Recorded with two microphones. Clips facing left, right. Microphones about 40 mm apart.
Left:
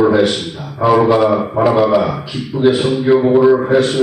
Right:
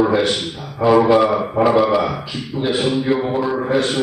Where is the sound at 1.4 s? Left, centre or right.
Centre.